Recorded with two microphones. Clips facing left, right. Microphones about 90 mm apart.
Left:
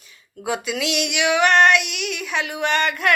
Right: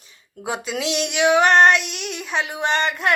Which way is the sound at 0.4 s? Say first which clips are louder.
Left 1 dB; 30° right (ahead or behind).